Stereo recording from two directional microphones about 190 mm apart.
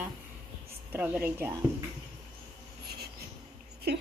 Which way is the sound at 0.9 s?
10° right (ahead or behind).